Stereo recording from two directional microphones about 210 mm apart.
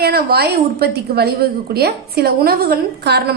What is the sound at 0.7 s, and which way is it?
A woman's voice, 50° right (ahead or behind).